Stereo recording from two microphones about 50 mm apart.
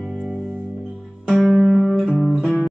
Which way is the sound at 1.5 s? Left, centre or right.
Centre.